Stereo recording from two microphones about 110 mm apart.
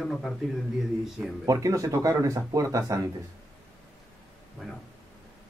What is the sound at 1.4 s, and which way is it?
Speech, 30° right (ahead or behind).